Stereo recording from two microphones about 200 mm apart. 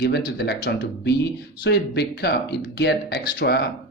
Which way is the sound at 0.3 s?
55° left (ahead or behind).